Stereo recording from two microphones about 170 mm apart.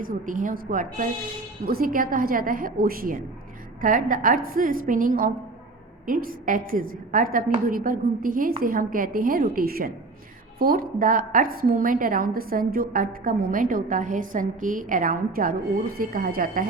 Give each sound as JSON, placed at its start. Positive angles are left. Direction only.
{"t": 0.0, "sound": "a woman's voice", "side_deg": -50}